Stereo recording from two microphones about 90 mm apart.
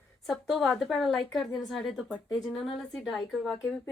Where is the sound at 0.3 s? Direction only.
Centre (ahead or behind).